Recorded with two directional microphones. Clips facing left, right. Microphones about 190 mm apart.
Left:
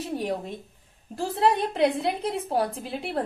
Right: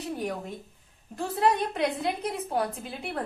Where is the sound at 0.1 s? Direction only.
25° left (ahead or behind).